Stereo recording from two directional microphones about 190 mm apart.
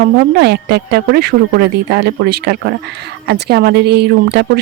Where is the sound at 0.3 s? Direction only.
60° right (ahead or behind).